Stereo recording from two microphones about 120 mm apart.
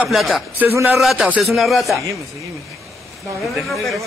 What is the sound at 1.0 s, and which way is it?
Speech, centre (ahead or behind).